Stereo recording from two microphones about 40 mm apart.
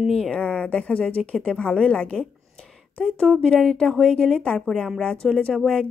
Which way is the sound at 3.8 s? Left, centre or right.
Centre.